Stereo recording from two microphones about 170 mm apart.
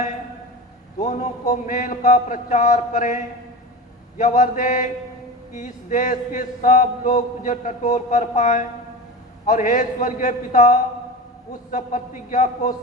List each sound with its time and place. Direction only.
0.9 s mantra: 45° left (ahead or behind)